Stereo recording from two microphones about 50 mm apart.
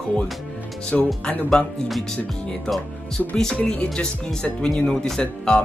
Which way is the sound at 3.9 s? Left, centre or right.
Centre.